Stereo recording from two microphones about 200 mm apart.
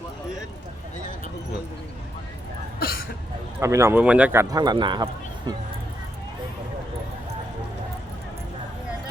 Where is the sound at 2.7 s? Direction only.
50° left (ahead or behind).